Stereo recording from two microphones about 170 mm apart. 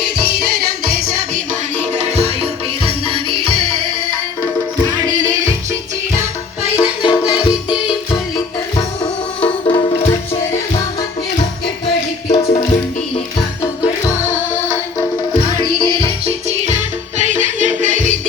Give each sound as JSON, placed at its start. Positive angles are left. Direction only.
{"t": 2.2, "sound": "music", "side_deg": -35}
{"t": 6.7, "sound": "music", "side_deg": 25}
{"t": 7.7, "sound": "music", "side_deg": -5}
{"t": 9.4, "sound": "music", "side_deg": 30}
{"t": 12.3, "sound": "music", "side_deg": 40}
{"t": 13.6, "sound": "music", "side_deg": 20}
{"t": 15.6, "sound": "music", "side_deg": -30}